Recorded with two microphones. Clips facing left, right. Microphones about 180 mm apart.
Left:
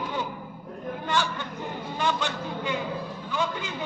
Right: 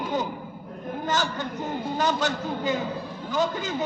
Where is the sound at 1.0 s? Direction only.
40° right (ahead or behind).